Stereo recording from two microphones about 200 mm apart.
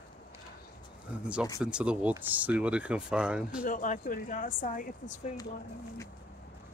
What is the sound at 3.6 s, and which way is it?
Speech, 40° left (ahead or behind).